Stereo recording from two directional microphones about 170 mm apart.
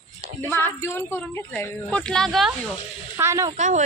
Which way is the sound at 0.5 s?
15° left (ahead or behind).